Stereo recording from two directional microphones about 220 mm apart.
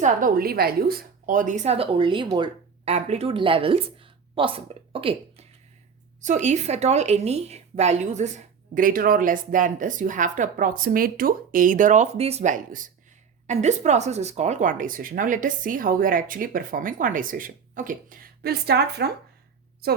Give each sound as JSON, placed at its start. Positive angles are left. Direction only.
{"t": 0.0, "sound": "a woman's voice", "side_deg": -40}